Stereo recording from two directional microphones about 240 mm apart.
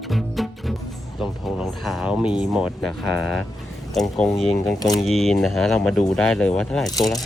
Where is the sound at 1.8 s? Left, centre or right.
Centre.